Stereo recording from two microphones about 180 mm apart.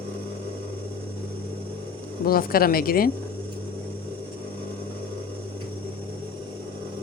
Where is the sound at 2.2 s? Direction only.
55° left (ahead or behind).